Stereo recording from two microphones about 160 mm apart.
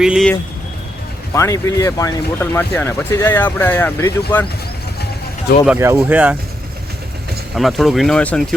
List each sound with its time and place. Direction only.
0.0 s speech: 5° right (ahead or behind)
1.3 s speech: 20° left (ahead or behind)
5.6 s speech: 15° right (ahead or behind)
7.5 s speech: centre (ahead or behind)